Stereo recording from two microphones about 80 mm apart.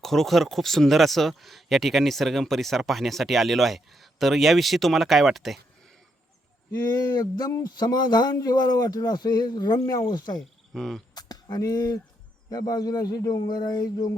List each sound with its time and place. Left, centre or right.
0.0 s speech: centre
6.7 s speech: left
10.8 s speech: centre
11.1 s speech: left